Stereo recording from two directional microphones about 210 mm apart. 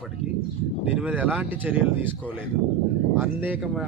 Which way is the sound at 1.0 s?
5° right (ahead or behind).